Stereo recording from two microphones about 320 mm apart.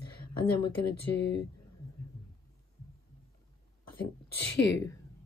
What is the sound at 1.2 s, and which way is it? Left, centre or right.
Speech, left.